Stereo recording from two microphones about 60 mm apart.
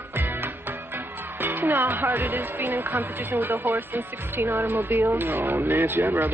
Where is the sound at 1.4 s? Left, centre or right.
Right.